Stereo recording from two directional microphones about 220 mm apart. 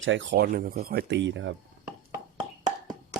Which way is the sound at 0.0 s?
60° right (ahead or behind).